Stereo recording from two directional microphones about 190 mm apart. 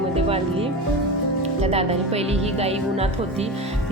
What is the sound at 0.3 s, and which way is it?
A woman's voice, 30° right (ahead or behind).